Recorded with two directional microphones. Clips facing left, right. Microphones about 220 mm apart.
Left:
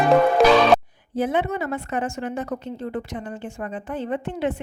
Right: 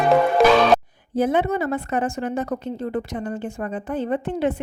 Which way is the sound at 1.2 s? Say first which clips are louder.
Right 3 dB; 40° right (ahead or behind).